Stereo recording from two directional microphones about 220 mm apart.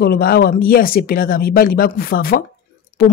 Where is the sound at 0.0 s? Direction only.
45° left (ahead or behind).